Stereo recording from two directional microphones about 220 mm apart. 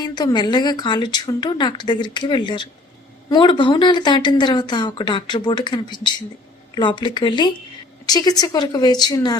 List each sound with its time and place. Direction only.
0.0 s a woman's voice: 20° left (ahead or behind)